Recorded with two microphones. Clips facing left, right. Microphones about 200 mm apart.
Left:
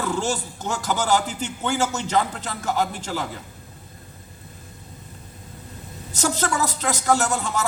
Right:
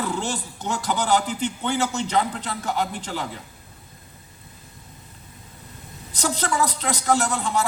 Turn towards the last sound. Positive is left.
turn(degrees=45)  # may be behind; listen again after turning